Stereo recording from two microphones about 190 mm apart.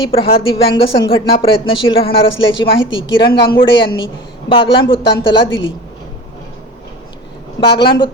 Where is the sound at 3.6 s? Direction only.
25° left (ahead or behind).